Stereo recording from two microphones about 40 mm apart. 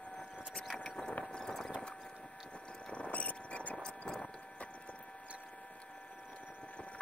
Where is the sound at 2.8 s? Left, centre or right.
Left.